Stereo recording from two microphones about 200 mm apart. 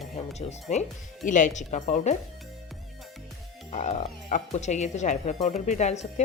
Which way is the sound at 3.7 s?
35° left (ahead or behind).